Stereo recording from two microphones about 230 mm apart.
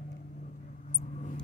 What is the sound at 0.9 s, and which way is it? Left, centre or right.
Vehicle, left.